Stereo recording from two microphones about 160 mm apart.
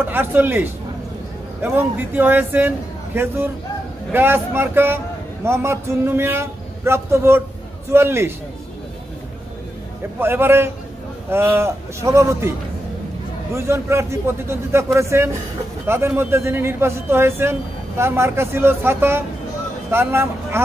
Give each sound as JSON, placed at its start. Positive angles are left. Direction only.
{"t": 0.0, "sound": "speech", "side_deg": -10}
{"t": 4.1, "sound": "a man's voice", "side_deg": -15}
{"t": 10.1, "sound": "speech", "side_deg": -15}